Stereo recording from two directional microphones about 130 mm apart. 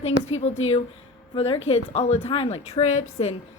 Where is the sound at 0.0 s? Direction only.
55° left (ahead or behind).